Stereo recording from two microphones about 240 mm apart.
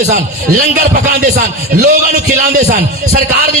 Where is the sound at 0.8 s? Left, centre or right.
Right.